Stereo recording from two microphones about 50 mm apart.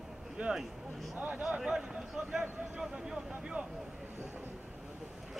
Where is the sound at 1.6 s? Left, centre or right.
Centre.